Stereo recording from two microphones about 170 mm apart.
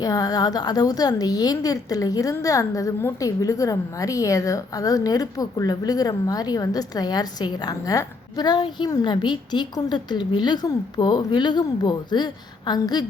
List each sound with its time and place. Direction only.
0.0 s a woman's voice: 20° left (ahead or behind)